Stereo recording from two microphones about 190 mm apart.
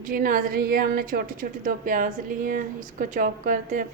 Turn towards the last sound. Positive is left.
turn(degrees=-45)  # may be behind; listen again after turning